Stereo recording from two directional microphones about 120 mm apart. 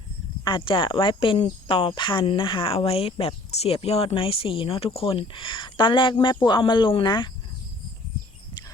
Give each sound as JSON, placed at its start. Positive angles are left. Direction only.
{"t": 0.4, "sound": "speech", "side_deg": 45}